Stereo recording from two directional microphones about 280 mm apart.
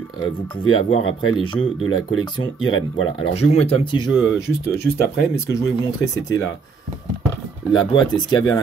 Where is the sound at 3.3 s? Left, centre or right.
Left.